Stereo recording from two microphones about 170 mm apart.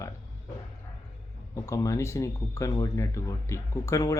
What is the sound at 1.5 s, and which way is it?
Speech, 20° left (ahead or behind).